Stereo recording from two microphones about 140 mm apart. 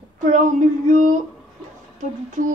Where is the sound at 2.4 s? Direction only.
70° right (ahead or behind).